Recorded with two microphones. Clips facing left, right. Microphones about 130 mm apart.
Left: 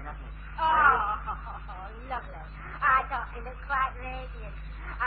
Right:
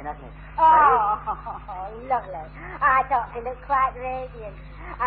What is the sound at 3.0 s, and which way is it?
Speech, 50° right (ahead or behind).